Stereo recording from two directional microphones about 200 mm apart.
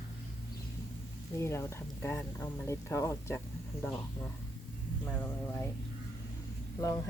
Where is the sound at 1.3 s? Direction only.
15° left (ahead or behind).